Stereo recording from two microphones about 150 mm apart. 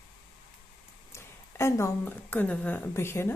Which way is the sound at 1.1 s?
20° left (ahead or behind).